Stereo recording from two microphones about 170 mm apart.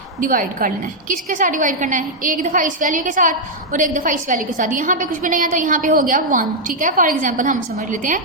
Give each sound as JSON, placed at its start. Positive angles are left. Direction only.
{"t": 0.2, "sound": "a woman's voice", "side_deg": -55}